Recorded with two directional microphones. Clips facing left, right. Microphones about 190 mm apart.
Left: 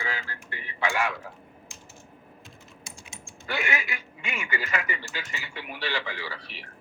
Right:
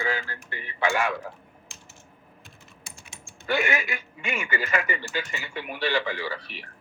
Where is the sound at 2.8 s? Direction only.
60° right (ahead or behind).